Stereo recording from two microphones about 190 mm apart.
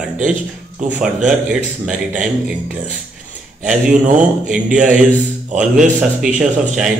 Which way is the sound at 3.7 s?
40° right (ahead or behind).